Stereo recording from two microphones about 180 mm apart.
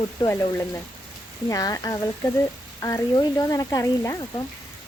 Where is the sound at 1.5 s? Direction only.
20° left (ahead or behind).